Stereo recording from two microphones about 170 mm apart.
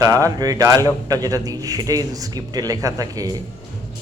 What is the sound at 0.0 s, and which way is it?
A man's voice, 20° right (ahead or behind).